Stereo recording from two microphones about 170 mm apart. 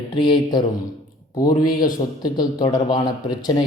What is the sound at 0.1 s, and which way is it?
A man's voice, 25° left (ahead or behind).